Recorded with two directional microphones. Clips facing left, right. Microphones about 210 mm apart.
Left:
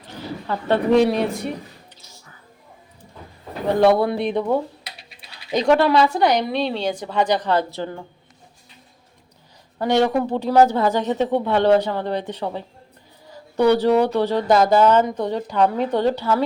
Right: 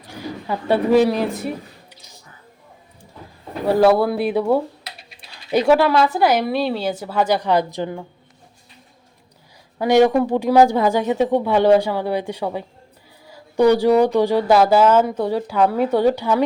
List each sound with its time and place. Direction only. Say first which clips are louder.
0.0 s speech: right 1 dB; 10° right (ahead or behind)
2.0 s music: right 1 dB; 15° right (ahead or behind)
3.7 s speech: right 1 dB; 5° right (ahead or behind)
9.7 s speech: right 4 dB; 10° right (ahead or behind)